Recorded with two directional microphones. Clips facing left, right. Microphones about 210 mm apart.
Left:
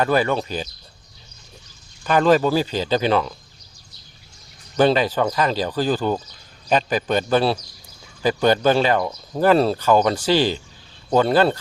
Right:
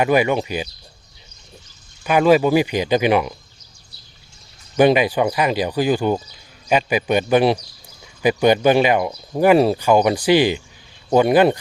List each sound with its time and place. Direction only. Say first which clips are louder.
0.0 s speech: right 2 dB; 15° right (ahead or behind)
2.0 s speech: right 2 dB; 10° right (ahead or behind)
4.8 s speech: right 3 dB; 15° right (ahead or behind)